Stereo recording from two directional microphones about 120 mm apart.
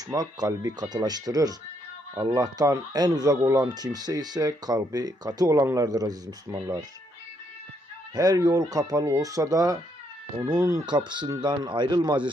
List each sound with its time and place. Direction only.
0.1 s speech: 30° right (ahead or behind)
8.1 s speech: 30° right (ahead or behind)
10.8 s speech: 40° right (ahead or behind)